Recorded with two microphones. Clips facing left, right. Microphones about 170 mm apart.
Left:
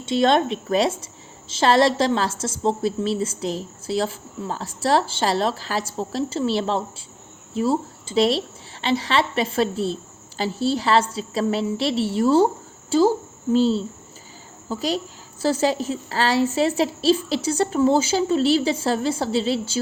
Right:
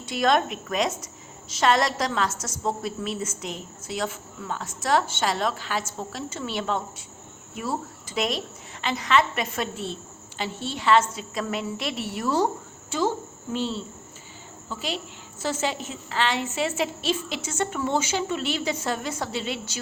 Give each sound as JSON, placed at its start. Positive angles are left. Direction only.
{"t": 0.0, "sound": "a woman's voice", "side_deg": 25}